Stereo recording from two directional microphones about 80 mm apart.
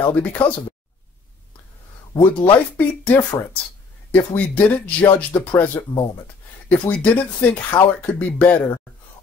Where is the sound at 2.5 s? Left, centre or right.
Left.